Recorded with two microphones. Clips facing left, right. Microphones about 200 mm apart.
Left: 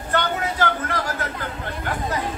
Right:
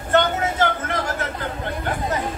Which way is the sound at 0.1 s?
25° right (ahead or behind).